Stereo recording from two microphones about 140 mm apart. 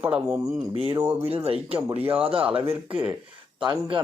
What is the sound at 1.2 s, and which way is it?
Speech, 45° right (ahead or behind).